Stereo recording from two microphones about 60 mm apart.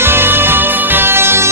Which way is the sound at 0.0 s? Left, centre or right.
Right.